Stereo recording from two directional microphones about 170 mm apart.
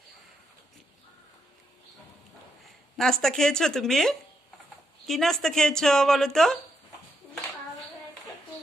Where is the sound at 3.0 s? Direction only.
5° left (ahead or behind).